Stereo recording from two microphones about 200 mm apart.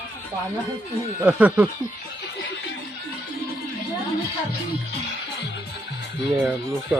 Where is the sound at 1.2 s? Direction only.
5° right (ahead or behind).